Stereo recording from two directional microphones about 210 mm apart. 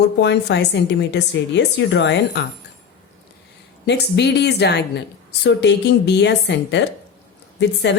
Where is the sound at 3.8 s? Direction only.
55° left (ahead or behind).